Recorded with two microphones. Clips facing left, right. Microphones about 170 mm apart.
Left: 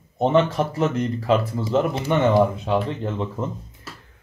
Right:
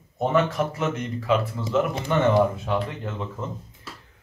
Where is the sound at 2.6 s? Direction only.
30° left (ahead or behind).